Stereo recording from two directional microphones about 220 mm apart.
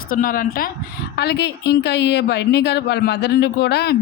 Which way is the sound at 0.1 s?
40° left (ahead or behind).